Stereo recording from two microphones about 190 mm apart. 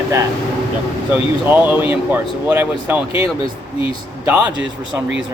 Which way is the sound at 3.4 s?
30° left (ahead or behind).